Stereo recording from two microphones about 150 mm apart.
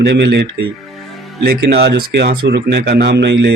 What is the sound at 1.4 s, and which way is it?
Speech, 90° right.